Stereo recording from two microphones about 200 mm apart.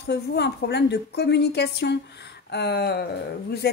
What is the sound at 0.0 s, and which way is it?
A woman's voice, 55° left (ahead or behind).